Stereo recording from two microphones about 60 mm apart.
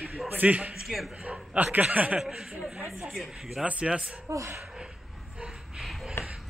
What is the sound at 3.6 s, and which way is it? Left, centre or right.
Speech, centre.